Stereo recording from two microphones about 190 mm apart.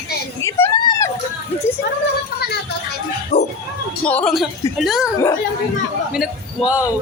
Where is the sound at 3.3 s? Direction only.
35° left (ahead or behind).